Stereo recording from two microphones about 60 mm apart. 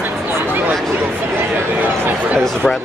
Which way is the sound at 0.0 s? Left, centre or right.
Right.